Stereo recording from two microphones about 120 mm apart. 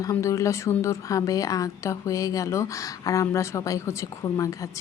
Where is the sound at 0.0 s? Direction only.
25° left (ahead or behind).